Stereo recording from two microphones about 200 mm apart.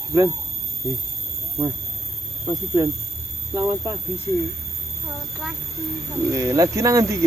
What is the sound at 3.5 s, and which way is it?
Speech, 15° right (ahead or behind).